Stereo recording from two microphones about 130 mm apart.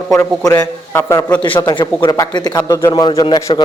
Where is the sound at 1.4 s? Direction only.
40° left (ahead or behind); by 3.0 s 25° left (ahead or behind).